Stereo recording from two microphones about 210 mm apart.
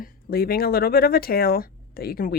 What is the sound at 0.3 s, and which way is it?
Speech, 45° left (ahead or behind).